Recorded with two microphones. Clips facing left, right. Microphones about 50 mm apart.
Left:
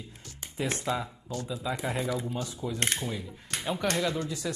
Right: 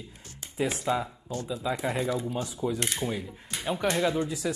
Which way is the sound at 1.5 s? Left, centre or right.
Centre.